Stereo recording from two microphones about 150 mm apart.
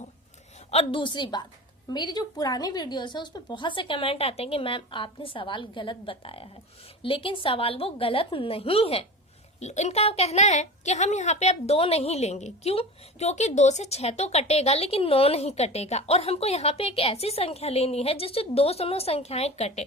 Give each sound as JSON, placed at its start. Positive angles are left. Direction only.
{"t": 0.7, "sound": "a woman's voice", "side_deg": 40}